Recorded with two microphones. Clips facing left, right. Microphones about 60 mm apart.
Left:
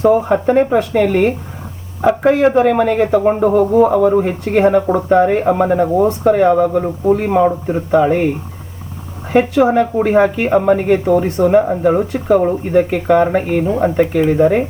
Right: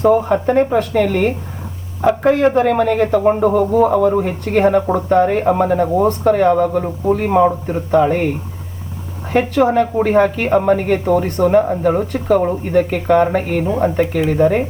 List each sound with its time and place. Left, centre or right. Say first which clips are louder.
0.0 s speech: left 1 dB; centre
9.3 s speech: left 2 dB; centre